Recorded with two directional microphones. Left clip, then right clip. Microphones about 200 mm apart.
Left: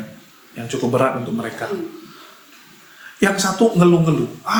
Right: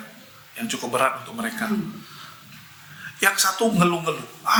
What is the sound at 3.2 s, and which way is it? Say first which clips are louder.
Speech: left 3 dB; 35° right (ahead or behind).